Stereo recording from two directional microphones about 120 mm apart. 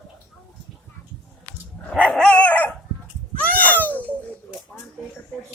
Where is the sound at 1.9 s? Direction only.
5° left (ahead or behind).